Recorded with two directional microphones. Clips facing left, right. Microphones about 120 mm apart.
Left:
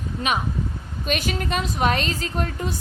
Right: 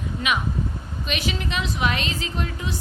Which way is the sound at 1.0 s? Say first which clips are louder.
Left 3 dB; 45° left (ahead or behind).